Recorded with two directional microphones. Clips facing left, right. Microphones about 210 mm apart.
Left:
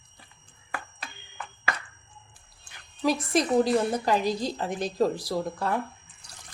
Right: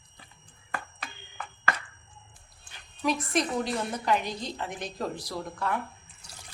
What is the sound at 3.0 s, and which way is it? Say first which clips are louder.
A woman's voice: left 3 dB; 35° left (ahead or behind).